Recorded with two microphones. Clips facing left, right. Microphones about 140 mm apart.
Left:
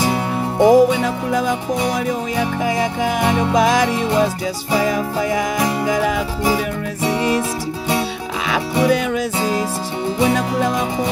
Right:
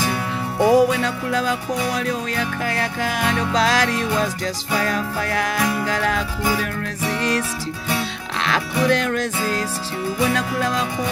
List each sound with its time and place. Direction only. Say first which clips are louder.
0.0 s music: left 5 dB; 20° left (ahead or behind)
8.8 s music: left 2 dB; 10° left (ahead or behind)